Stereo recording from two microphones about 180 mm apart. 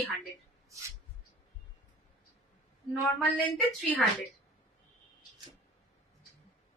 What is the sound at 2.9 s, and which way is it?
A woman's voice, centre (ahead or behind).